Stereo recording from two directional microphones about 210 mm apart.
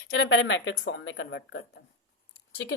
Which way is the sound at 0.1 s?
60° left (ahead or behind).